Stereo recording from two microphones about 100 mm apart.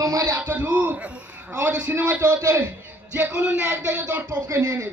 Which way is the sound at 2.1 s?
25° right (ahead or behind).